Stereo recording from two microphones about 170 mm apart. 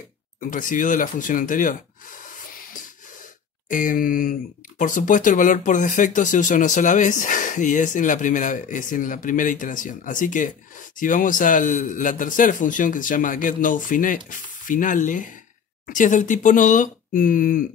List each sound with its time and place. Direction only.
0.4 s speech: 50° left (ahead or behind)
3.6 s speech: 50° left (ahead or behind)